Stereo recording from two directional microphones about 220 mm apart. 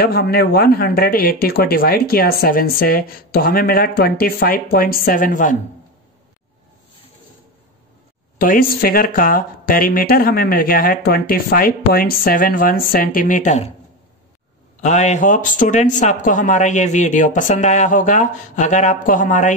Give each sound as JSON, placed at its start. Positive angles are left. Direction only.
{"t": 0.0, "sound": "speech", "side_deg": 45}
{"t": 8.4, "sound": "speech", "side_deg": 40}
{"t": 14.8, "sound": "speech", "side_deg": 30}